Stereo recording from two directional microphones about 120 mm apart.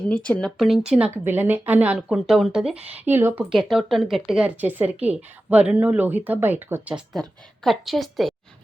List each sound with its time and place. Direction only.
0.1 s speech: 10° left (ahead or behind)
0.6 s a woman's voice: 5° right (ahead or behind)
1.1 s a woman's voice: 20° right (ahead or behind)
2.9 s speech: 15° right (ahead or behind)
3.5 s speech: 5° right (ahead or behind)
6.9 s a woman's voice: centre (ahead or behind)